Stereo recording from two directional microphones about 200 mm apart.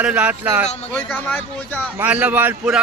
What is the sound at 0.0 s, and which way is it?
Speech, 5° right (ahead or behind).